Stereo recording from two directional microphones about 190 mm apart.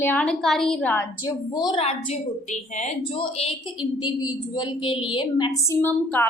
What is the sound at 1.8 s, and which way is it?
A woman's voice, 35° left (ahead or behind).